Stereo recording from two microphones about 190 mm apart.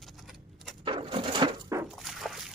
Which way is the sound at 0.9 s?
25° right (ahead or behind).